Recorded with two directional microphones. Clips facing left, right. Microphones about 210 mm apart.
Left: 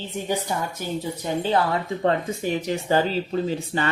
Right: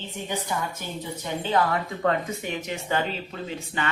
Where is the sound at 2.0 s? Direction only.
30° left (ahead or behind).